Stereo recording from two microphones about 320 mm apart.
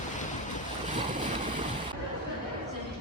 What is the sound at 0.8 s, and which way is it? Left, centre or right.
Boat, right.